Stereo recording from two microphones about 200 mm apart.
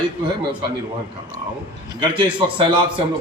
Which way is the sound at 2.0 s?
25° right (ahead or behind).